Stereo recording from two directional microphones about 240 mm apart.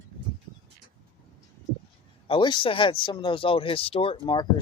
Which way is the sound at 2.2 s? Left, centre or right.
Left.